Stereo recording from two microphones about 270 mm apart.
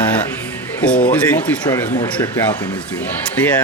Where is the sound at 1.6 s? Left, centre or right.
Centre.